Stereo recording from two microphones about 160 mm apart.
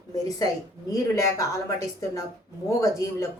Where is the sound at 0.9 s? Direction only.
20° left (ahead or behind).